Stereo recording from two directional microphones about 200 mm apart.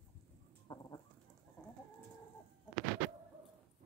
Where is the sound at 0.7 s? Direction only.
25° left (ahead or behind).